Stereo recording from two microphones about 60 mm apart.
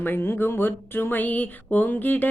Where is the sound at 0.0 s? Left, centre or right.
Left.